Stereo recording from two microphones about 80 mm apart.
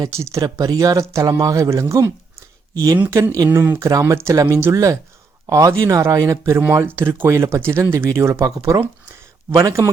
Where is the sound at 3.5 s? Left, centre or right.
Right.